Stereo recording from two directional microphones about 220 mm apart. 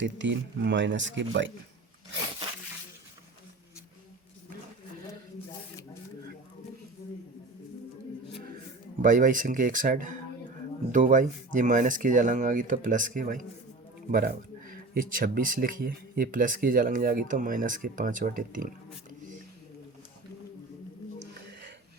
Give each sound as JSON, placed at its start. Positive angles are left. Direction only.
{"t": 0.0, "sound": "speech", "side_deg": -55}
{"t": 9.0, "sound": "speech", "side_deg": -35}